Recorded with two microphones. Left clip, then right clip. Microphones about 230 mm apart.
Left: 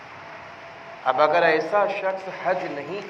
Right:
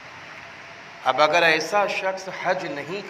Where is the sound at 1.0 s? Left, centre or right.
Right.